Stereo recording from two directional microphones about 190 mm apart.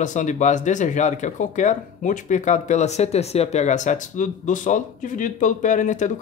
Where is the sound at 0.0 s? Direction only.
40° left (ahead or behind).